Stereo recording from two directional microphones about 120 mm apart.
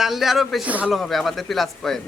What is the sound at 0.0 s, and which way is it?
Speech, centre (ahead or behind).